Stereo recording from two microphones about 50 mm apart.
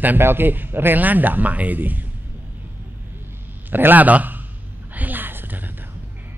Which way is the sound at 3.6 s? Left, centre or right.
Right.